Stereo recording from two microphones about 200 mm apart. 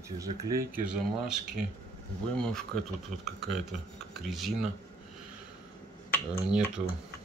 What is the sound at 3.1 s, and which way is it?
Speech, 40° right (ahead or behind).